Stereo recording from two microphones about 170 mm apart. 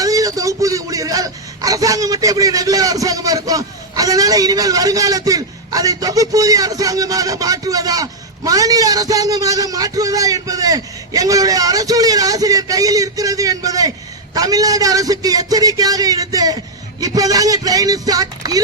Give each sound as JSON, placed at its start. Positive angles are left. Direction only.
{"t": 0.0, "sound": "a man's voice", "side_deg": -20}